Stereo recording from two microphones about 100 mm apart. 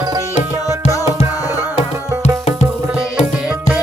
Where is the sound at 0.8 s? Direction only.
35° left (ahead or behind).